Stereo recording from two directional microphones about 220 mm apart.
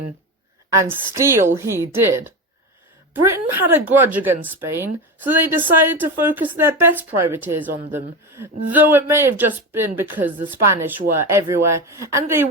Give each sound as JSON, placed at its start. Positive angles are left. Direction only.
{"t": 0.9, "sound": "a woman's voice", "side_deg": -10}